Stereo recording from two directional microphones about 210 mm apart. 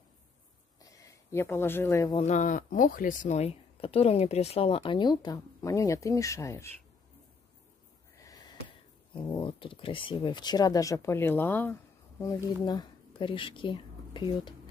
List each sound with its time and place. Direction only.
0.7 s speech: 15° left (ahead or behind)
2.2 s speech: 35° left (ahead or behind); by 6.7 s 15° left (ahead or behind)
8.2 s sniff: 15° left (ahead or behind)
9.2 s speech: 20° left (ahead or behind)